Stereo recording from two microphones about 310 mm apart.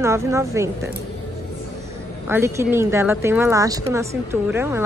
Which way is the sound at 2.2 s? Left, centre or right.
Centre.